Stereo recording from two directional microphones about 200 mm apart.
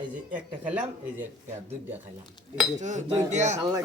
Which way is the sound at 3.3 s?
35° right (ahead or behind).